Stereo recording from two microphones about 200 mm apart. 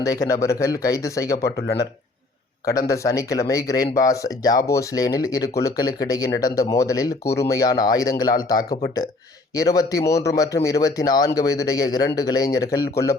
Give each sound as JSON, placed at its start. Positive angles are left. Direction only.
{"t": 0.0, "sound": "speech", "side_deg": 15}
{"t": 2.6, "sound": "speech", "side_deg": 15}